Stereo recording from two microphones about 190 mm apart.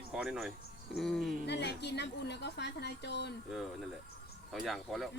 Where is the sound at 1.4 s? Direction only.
65° left (ahead or behind).